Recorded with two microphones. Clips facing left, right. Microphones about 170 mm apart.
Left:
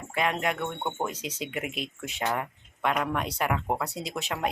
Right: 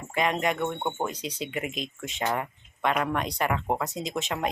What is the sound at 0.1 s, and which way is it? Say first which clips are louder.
Speech: right 2 dB; centre (ahead or behind).